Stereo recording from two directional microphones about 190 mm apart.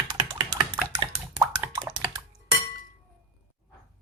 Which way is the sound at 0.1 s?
30° right (ahead or behind).